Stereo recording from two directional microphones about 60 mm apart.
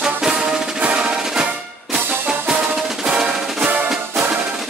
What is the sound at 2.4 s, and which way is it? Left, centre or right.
Music, centre.